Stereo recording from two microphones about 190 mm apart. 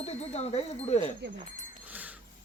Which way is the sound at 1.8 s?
10° right (ahead or behind).